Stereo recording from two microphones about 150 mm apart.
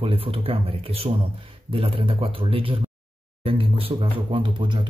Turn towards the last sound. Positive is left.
turn(degrees=-35)  # may be behind; listen again after turning